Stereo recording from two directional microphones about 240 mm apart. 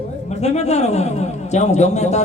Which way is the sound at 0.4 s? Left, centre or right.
Left.